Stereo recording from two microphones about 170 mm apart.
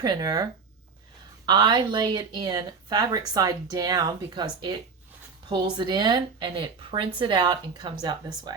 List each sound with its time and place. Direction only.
0.0 s speech: 25° right (ahead or behind)
1.5 s speech: 25° right (ahead or behind)